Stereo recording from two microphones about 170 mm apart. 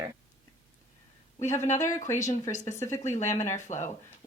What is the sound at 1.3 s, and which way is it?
Speech, 15° left (ahead or behind).